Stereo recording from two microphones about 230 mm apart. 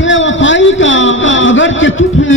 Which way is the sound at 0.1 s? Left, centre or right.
Left.